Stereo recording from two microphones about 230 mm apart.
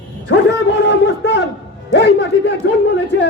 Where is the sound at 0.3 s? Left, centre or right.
Left.